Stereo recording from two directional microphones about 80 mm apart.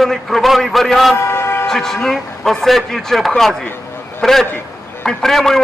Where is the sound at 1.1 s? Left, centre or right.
Left.